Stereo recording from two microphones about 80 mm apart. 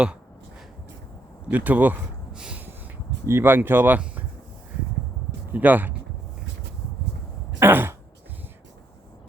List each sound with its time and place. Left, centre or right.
1.5 s speech: centre
2.3 s snort: centre
3.2 s speech: right
5.5 s speech: right
7.6 s throat clearing: right